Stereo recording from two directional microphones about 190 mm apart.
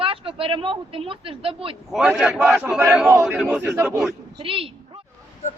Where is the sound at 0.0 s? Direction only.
30° right (ahead or behind).